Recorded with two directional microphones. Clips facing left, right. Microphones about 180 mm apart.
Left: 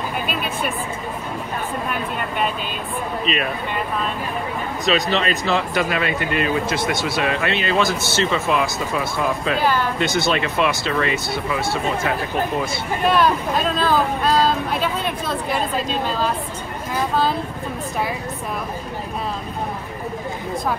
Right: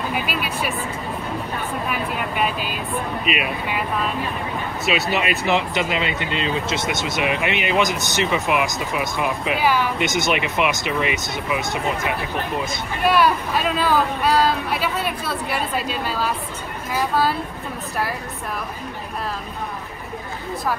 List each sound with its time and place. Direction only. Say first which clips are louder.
0.1 s speech: even; 5° right (ahead or behind)
1.9 s speech: even; 5° right (ahead or behind)
5.1 s speech: even; 10° right (ahead or behind)